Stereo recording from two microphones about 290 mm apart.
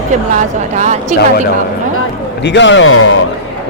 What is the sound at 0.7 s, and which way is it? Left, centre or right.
Speech, right.